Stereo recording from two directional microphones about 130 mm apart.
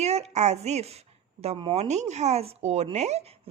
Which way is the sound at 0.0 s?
55° right (ahead or behind).